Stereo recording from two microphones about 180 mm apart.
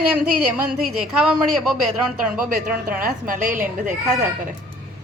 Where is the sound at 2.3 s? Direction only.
50° right (ahead or behind).